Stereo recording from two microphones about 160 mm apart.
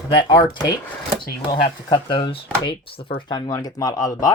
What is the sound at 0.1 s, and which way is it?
Speech, 30° left (ahead or behind).